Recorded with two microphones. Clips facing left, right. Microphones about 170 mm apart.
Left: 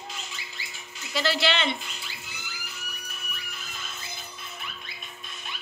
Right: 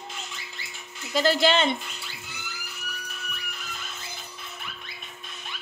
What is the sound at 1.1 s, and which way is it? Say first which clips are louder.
Speech: right 5 dB; 45° right (ahead or behind).